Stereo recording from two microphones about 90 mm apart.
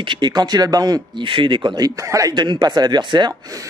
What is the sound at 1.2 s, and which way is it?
Speech, 65° right (ahead or behind).